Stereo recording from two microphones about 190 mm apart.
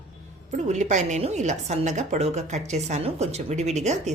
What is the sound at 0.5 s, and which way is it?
A woman's voice, 40° right (ahead or behind).